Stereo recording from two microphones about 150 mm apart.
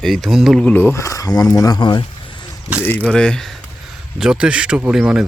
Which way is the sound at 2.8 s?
10° left (ahead or behind).